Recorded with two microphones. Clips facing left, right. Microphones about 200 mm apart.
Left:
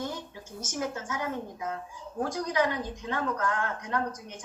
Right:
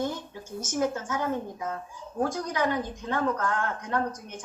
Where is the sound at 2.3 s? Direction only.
50° right (ahead or behind).